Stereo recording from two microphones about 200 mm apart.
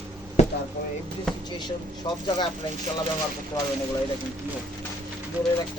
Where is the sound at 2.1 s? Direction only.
25° left (ahead or behind).